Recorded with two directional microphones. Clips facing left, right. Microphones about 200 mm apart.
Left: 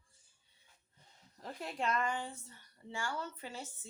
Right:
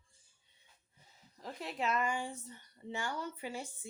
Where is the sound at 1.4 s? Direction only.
Centre (ahead or behind).